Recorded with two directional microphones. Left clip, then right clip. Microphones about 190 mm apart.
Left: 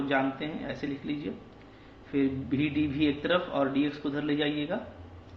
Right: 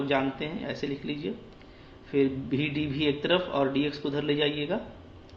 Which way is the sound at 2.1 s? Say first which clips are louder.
Right 3 dB; 30° right (ahead or behind).